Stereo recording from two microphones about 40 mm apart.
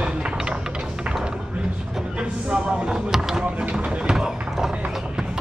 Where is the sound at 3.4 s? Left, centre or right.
Right.